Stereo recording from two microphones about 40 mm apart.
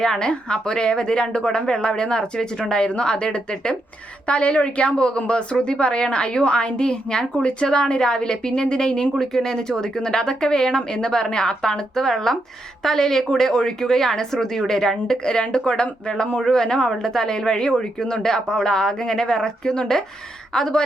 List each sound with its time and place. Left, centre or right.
0.0 s a woman's voice: centre